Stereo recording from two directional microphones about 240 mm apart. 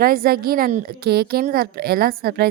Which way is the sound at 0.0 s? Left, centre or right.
Right.